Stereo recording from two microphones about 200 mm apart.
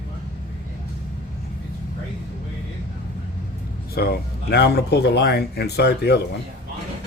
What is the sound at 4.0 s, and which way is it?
Speech, 55° left (ahead or behind).